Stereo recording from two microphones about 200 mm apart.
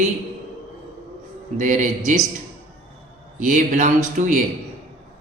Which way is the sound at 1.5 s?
40° right (ahead or behind).